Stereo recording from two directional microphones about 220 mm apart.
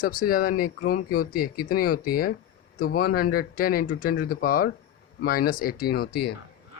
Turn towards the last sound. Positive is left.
turn(degrees=45)  # may be behind; listen again after turning